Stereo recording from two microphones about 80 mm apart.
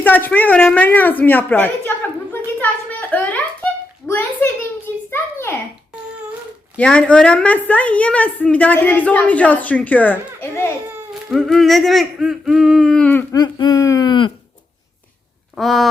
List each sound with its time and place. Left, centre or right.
0.0 s a woman's voice: left
3.1 s music: left
4.0 s a sound: left
6.7 s a woman's voice: centre
11.1 s speech: centre
12.3 s humming: centre
13.0 s a woman's voice: centre
13.3 s speech: left
14.1 s a sound: left
15.5 s humming: centre